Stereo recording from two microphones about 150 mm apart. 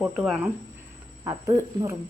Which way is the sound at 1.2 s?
20° right (ahead or behind).